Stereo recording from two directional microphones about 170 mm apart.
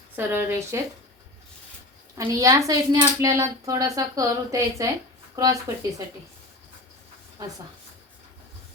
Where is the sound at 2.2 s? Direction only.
20° right (ahead or behind).